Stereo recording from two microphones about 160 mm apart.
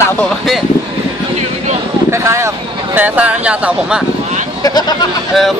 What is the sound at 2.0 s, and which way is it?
Speech, 15° right (ahead or behind).